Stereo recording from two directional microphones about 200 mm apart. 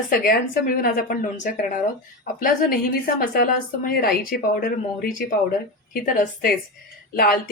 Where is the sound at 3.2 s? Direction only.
45° left (ahead or behind).